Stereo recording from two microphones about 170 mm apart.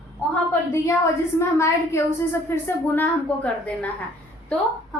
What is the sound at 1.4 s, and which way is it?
A child's voice, 15° left (ahead or behind).